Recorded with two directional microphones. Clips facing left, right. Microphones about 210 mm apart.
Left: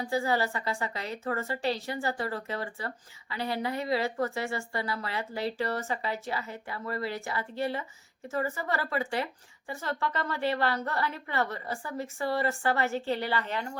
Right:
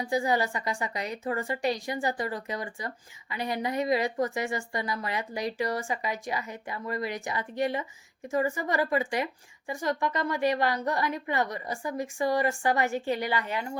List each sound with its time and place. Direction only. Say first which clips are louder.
0.0 s a woman's voice: right 1 dB; 15° right (ahead or behind)